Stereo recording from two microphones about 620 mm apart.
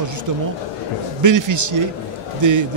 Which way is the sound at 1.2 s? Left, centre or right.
Right.